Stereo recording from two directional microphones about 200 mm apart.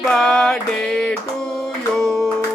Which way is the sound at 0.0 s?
Centre (ahead or behind).